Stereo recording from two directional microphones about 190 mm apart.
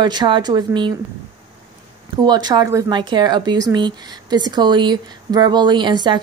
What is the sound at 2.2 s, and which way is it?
Speech, 20° right (ahead or behind).